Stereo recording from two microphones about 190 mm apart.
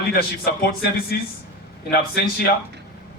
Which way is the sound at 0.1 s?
55° left (ahead or behind).